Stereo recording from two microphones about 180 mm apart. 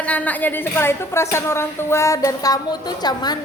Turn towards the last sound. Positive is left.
turn(degrees=20)  # may be behind; listen again after turning